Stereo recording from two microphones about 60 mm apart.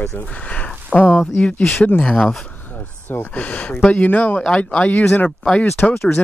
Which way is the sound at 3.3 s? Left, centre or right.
Left.